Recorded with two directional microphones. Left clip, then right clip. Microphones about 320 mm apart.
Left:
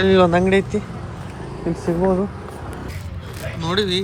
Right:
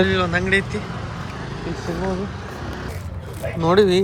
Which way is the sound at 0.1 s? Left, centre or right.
Centre.